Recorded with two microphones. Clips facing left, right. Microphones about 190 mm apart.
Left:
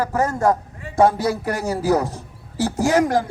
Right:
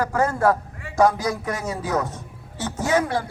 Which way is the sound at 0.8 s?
25° left (ahead or behind).